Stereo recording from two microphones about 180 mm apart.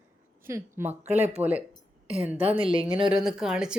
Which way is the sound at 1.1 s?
40° right (ahead or behind).